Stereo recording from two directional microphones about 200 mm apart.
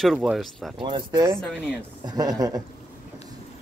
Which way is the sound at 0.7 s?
25° right (ahead or behind).